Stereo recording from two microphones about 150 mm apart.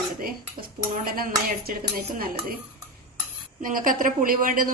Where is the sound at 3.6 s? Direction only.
65° right (ahead or behind).